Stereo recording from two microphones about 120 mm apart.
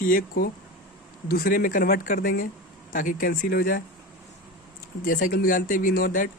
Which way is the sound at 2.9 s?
90° left.